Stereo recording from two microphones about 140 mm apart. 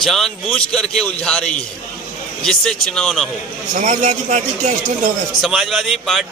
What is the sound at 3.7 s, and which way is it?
Speech, 65° right (ahead or behind).